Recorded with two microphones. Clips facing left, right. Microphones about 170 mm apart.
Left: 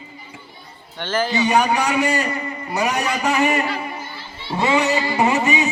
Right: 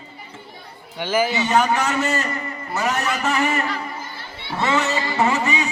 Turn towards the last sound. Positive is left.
turn(degrees=20)  # may be behind; listen again after turning